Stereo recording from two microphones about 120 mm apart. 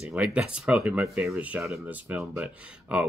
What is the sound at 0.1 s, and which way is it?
Speech, 10° right (ahead or behind).